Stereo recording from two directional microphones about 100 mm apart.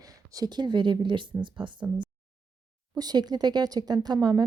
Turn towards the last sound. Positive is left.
turn(degrees=-45)  # may be behind; listen again after turning